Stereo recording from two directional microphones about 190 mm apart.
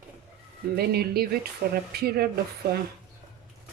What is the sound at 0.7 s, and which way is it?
Speech, 55° right (ahead or behind).